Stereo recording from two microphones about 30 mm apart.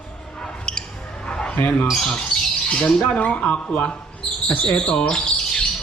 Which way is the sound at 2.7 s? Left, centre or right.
Left.